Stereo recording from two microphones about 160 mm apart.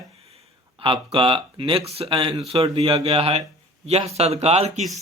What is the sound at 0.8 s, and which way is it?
Speech, 30° right (ahead or behind).